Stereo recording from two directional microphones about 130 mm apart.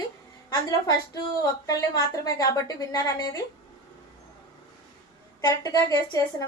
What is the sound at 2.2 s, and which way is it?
A woman's voice, 30° left (ahead or behind).